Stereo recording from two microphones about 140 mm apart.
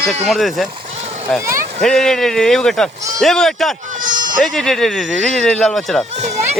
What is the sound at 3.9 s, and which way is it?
Sheep, 70° right (ahead or behind).